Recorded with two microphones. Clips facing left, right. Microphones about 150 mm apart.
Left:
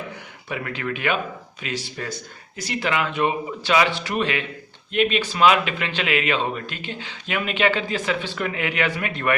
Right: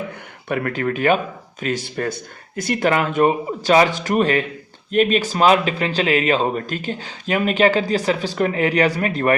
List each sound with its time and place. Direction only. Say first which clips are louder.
0.4 s speech: right 7 dB; 50° right (ahead or behind)
1.6 s speech: right 7 dB; 50° right (ahead or behind)